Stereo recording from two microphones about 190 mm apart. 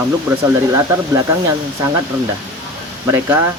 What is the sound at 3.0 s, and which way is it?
Speech, 10° right (ahead or behind).